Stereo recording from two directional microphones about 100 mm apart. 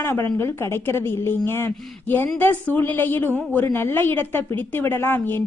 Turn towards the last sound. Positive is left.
turn(degrees=20)  # may be behind; listen again after turning